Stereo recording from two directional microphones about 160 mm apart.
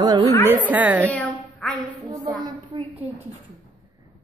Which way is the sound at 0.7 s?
10° right (ahead or behind).